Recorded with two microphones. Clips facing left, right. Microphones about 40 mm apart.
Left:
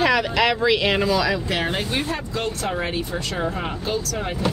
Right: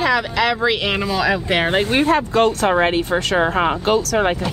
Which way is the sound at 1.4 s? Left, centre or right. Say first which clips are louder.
Right 6 dB; right.